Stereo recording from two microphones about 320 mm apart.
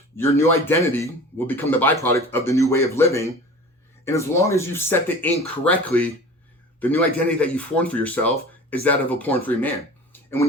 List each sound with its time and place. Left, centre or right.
0.2 s a man's voice: centre
7.3 s speech: centre
10.1 s a sound: centre